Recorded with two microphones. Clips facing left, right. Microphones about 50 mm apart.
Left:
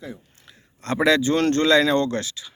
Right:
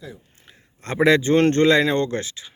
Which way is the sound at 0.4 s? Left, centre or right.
Right.